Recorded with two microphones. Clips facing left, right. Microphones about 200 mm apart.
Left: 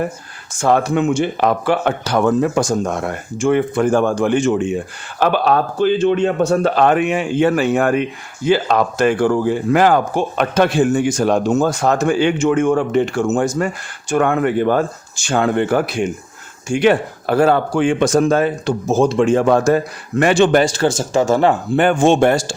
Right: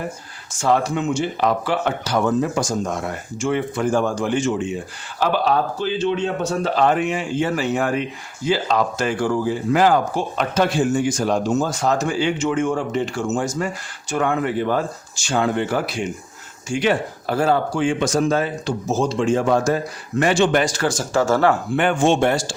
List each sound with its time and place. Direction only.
0.6 s speech: 55° left (ahead or behind)
20.5 s speech: 30° left (ahead or behind)
21.8 s speech: 40° left (ahead or behind)